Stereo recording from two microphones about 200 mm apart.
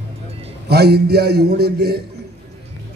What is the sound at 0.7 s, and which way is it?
Speech, 55° right (ahead or behind).